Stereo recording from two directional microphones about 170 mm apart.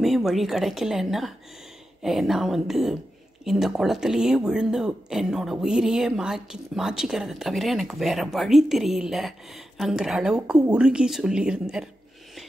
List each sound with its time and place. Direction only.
0.0 s speech: centre (ahead or behind)